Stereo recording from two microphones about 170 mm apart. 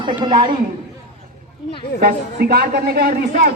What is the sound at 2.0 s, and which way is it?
A man's voice, 60° right (ahead or behind).